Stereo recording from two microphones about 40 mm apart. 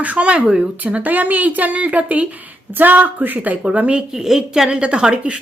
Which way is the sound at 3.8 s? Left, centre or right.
Right.